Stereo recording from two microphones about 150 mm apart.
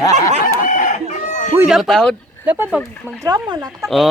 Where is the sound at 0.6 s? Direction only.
60° left (ahead or behind).